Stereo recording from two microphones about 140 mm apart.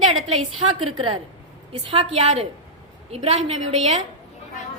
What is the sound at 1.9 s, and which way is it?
A woman's voice, 50° right (ahead or behind).